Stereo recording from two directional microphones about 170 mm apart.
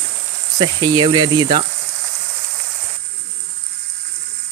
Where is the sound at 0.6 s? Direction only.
25° right (ahead or behind).